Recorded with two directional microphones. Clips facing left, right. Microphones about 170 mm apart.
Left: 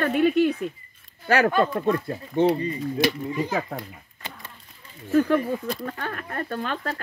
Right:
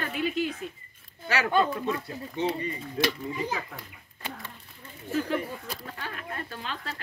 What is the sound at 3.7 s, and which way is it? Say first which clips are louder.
Speech: left 10 dB; 35° left (ahead or behind).